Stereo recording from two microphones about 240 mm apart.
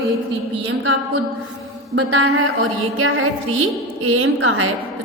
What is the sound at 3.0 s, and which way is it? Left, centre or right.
A woman's voice, right.